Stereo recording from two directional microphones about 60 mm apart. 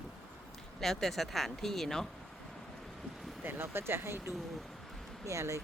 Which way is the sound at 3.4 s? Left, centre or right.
Right.